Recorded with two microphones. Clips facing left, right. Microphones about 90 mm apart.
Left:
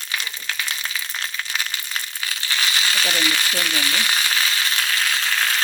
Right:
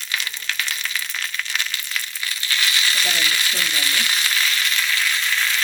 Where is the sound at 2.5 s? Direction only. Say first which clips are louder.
Even; 30° left (ahead or behind).